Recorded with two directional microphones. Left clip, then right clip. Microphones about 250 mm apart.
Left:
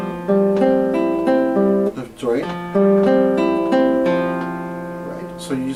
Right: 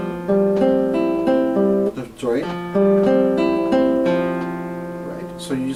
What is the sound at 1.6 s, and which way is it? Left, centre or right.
Guitar, left.